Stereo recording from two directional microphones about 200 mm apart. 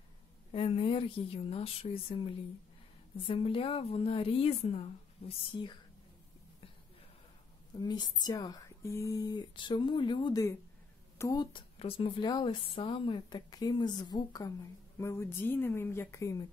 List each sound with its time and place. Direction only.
0.5 s speech: 25° left (ahead or behind)
7.7 s speech: 20° left (ahead or behind)